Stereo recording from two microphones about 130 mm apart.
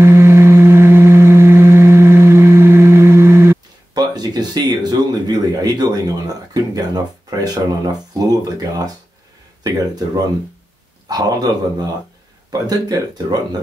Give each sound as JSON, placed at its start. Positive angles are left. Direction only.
{"t": 0.0, "sound": "a sound", "side_deg": -20}
{"t": 4.0, "sound": "speech", "side_deg": -30}
{"t": 11.1, "sound": "speech", "side_deg": -30}